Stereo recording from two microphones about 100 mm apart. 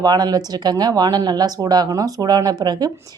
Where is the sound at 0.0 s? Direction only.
40° right (ahead or behind).